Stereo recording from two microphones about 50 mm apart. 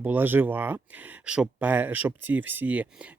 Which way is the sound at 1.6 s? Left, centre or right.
Right.